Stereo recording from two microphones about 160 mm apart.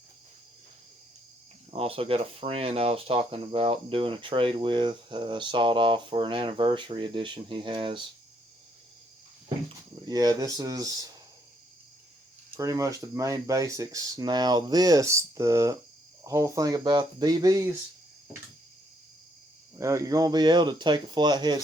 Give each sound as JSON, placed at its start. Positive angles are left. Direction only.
{"t": 1.7, "sound": "speech", "side_deg": -35}
{"t": 10.1, "sound": "speech", "side_deg": -25}
{"t": 12.5, "sound": "speech", "side_deg": -20}
{"t": 19.8, "sound": "speech", "side_deg": -20}